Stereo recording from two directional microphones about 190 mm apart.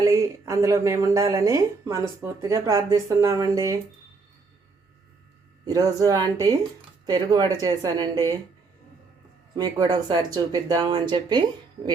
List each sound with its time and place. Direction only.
0.0 s speech: 15° right (ahead or behind)
5.6 s speech: 20° right (ahead or behind)
9.6 s speech: 20° right (ahead or behind)